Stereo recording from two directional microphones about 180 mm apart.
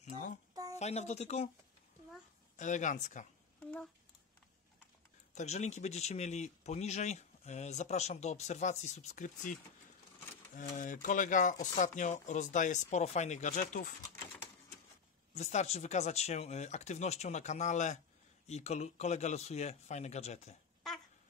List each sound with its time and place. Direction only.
0.0 s a sound: 45° left (ahead or behind)
0.7 s speech: 40° left (ahead or behind)
2.5 s speech: 45° left (ahead or behind)
5.3 s speech: 40° left (ahead or behind)
15.3 s speech: 35° left (ahead or behind)